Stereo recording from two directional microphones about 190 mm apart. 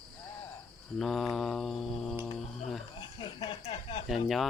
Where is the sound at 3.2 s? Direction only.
25° left (ahead or behind).